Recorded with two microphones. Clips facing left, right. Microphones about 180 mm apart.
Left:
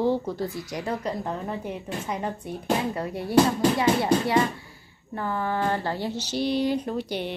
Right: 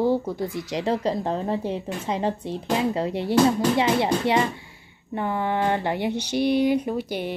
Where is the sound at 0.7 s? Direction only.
25° right (ahead or behind).